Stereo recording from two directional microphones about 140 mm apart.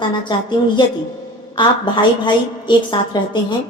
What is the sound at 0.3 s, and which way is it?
Music, 30° left (ahead or behind).